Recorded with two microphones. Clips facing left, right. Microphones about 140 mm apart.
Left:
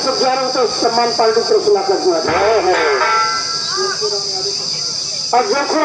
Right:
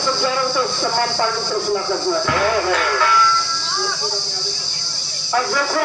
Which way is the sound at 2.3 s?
45° left (ahead or behind).